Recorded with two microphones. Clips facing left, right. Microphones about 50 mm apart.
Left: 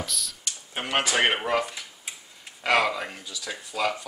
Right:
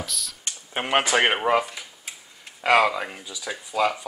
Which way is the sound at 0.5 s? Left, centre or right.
Right.